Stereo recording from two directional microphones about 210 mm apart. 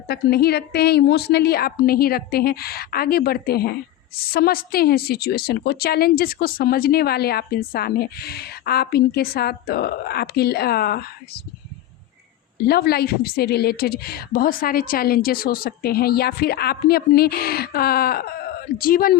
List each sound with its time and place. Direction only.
0.1 s a woman's voice: 50° left (ahead or behind)
12.6 s a woman's voice: 50° left (ahead or behind)